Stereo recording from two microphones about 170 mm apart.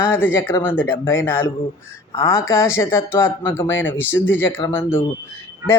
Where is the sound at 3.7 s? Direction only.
90° left.